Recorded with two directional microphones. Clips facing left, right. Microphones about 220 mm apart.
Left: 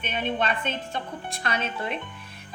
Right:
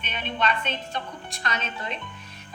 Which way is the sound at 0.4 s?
50° left (ahead or behind).